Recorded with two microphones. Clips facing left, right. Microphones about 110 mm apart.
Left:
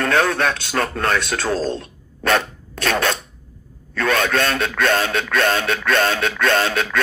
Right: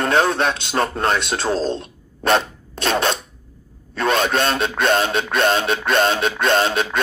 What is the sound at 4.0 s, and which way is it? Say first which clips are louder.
Speech: right 1 dB; 25° right (ahead or behind).